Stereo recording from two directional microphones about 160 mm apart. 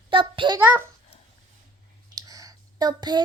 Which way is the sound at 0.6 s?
10° right (ahead or behind).